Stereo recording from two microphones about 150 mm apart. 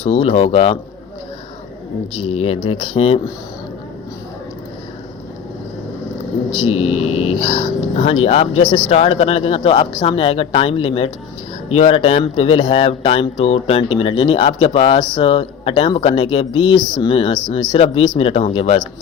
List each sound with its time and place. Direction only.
0.1 s speech: 45° left (ahead or behind)
2.6 s speech: 40° left (ahead or behind)
6.7 s speech: 45° left (ahead or behind)